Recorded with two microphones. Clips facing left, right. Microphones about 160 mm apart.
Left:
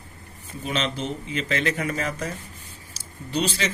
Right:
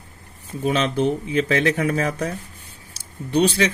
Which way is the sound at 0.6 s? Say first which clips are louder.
Right 8 dB; 55° right (ahead or behind).